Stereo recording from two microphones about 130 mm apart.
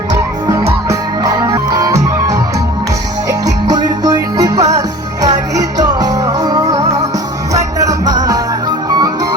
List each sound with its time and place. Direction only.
0.1 s music: 25° right (ahead or behind)